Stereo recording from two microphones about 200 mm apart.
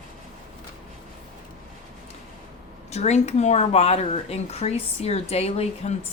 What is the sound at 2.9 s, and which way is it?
A woman's voice, 35° left (ahead or behind).